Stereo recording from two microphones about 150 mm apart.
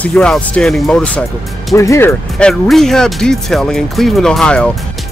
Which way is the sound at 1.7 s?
20° left (ahead or behind).